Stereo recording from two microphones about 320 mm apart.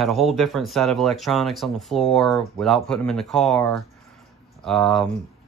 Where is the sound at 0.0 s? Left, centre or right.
Centre.